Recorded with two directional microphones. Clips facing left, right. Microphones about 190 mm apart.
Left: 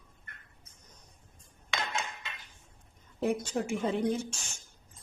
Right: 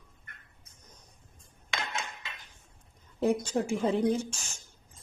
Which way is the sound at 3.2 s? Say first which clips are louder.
Right 3 dB; 35° right (ahead or behind).